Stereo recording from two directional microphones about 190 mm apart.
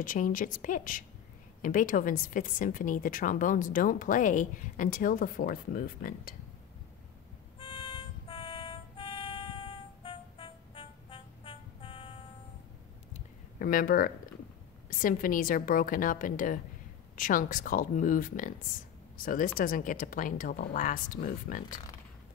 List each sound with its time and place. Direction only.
0.0 s a woman's voice: 45° left (ahead or behind)
7.5 s music: 30° left (ahead or behind)
13.1 s a sound: 45° left (ahead or behind)
14.9 s a woman's voice: 45° left (ahead or behind)